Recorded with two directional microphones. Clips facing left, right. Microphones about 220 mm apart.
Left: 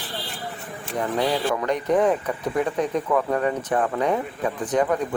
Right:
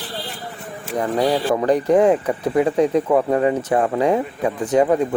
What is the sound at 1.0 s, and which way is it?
Speech, 35° right (ahead or behind).